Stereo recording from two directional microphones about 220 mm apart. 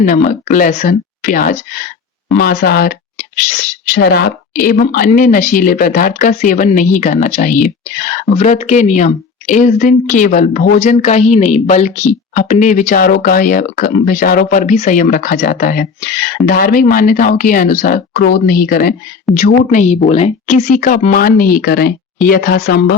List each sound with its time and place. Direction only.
0.0 s speech: 40° left (ahead or behind)
2.4 s a sound: 40° left (ahead or behind)
4.0 s speech: 45° left (ahead or behind)